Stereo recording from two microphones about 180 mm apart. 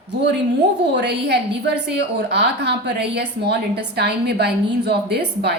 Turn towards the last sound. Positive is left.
turn(degrees=-65)  # may be behind; listen again after turning